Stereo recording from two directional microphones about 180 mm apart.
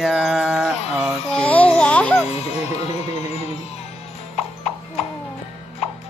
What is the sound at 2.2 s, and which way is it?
Speech, 35° left (ahead or behind).